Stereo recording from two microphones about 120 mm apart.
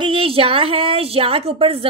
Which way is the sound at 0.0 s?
50° right (ahead or behind).